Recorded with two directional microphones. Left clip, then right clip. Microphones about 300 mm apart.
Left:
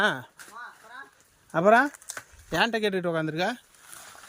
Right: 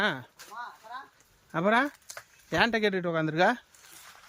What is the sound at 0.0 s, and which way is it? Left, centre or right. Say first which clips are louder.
Speech: left 4 dB; centre.